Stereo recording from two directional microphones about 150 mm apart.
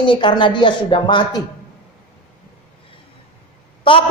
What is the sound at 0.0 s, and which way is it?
A man's voice, 30° left (ahead or behind).